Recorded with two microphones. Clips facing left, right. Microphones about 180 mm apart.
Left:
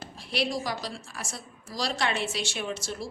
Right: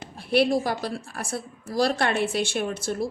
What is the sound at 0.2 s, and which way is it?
A woman's voice, 55° right (ahead or behind).